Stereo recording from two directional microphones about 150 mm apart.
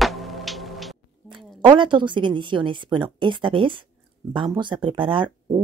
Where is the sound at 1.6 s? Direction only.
30° right (ahead or behind).